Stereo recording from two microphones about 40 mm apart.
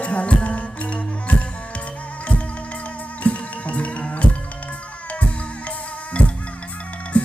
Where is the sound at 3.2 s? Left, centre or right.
Left.